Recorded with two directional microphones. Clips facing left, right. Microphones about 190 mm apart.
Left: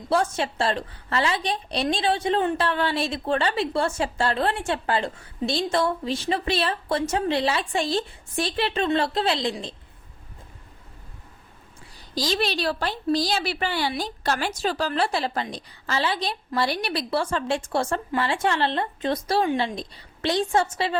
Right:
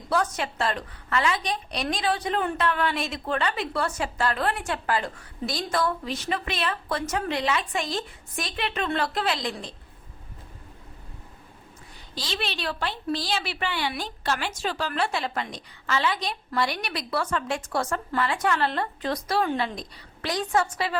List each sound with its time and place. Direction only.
0.1 s a woman's voice: 30° left (ahead or behind)
12.1 s a woman's voice: 40° left (ahead or behind)